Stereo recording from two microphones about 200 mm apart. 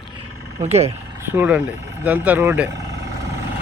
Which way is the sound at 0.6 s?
30° right (ahead or behind).